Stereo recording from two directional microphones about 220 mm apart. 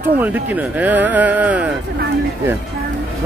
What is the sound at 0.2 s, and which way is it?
Speech, 10° right (ahead or behind).